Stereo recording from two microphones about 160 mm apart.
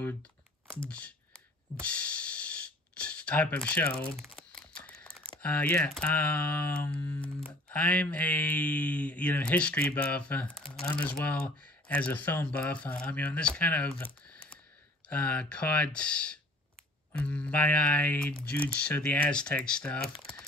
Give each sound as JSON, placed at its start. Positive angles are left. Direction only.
{"t": 0.7, "sound": "music", "side_deg": 5}
{"t": 4.5, "sound": "a sound", "side_deg": 5}
{"t": 5.4, "sound": "speech", "side_deg": 10}